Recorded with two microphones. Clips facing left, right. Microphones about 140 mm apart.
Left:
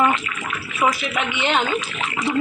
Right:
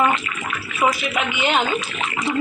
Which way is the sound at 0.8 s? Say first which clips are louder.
Right 1 dB; 5° right (ahead or behind).